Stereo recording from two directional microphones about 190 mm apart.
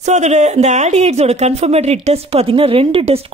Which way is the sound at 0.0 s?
35° right (ahead or behind).